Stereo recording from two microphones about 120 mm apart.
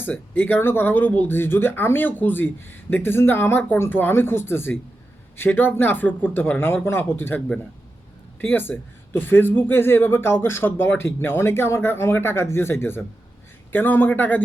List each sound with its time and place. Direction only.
0.0 s speech: 15° left (ahead or behind)